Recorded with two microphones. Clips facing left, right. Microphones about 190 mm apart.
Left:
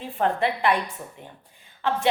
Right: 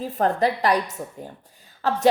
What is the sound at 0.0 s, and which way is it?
Speech, 40° right (ahead or behind).